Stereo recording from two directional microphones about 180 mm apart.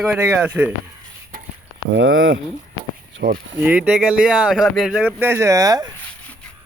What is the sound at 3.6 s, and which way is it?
Speech, 5° right (ahead or behind).